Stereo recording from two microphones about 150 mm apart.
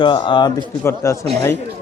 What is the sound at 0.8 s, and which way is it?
Speech, 20° left (ahead or behind).